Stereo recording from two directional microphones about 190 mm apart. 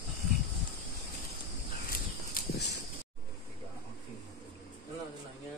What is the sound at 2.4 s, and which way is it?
Clip-clop, 50° left (ahead or behind).